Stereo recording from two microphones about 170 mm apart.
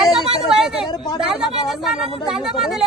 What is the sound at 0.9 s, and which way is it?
Speech, 25° left (ahead or behind).